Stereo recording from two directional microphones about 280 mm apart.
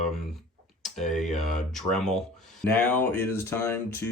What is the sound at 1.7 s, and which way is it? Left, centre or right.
Speech, centre.